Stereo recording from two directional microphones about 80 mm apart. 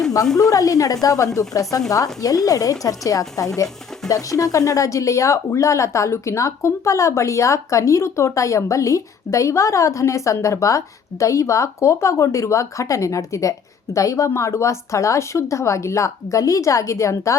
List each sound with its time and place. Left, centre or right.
0.3 s speech: left